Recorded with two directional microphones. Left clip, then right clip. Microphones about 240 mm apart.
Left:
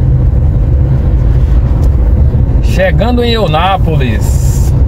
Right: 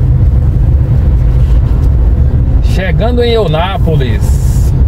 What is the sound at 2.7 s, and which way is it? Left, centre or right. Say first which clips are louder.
Speech: left 2 dB; left.